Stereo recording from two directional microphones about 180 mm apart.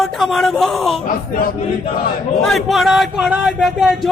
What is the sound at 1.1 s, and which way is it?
Speech, 55° left (ahead or behind).